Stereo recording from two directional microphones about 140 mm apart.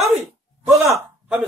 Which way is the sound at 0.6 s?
Centre (ahead or behind).